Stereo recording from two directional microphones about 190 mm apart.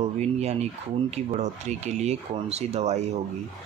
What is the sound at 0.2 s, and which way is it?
Speech, 35° right (ahead or behind).